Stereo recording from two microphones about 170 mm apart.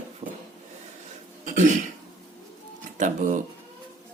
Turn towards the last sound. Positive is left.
turn(degrees=-45)  # may be behind; listen again after turning